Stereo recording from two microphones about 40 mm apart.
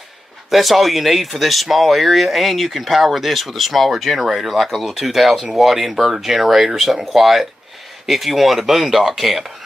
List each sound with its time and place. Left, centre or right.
0.5 s speech: centre